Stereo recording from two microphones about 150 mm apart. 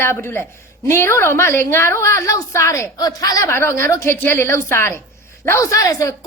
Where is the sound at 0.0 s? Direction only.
15° left (ahead or behind).